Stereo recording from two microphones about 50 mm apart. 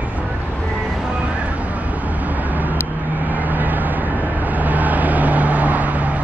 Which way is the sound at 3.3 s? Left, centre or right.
Right.